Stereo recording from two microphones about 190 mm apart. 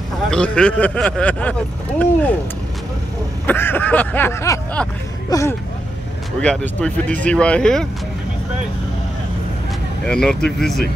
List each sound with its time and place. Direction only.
0.3 s speech: 5° left (ahead or behind)
3.4 s vehicle: 10° left (ahead or behind)
5.3 s speech: 15° left (ahead or behind)
10.0 s speech: 5° left (ahead or behind)